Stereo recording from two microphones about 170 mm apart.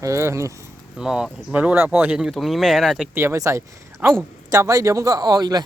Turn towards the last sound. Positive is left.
turn(degrees=-25)  # may be behind; listen again after turning